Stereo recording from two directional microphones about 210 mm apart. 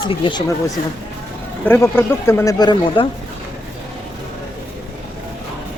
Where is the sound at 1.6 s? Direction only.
10° left (ahead or behind).